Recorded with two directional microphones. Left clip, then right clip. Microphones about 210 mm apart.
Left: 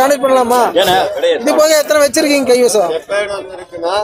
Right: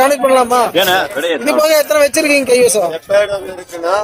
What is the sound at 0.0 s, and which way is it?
Speech, 5° left (ahead or behind).